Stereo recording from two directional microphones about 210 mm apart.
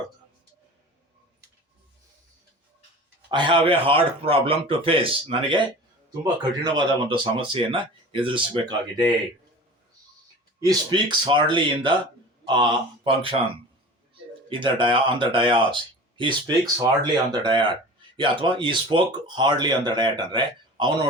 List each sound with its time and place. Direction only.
3.2 s speech: 20° right (ahead or behind)
10.6 s speech: 20° right (ahead or behind)
14.5 s speech: 25° right (ahead or behind)
17.4 s speech: 20° right (ahead or behind)